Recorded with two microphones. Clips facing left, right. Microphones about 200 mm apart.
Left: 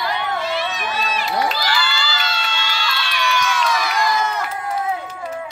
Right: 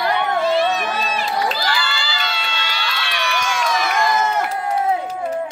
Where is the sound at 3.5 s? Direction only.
45° right (ahead or behind).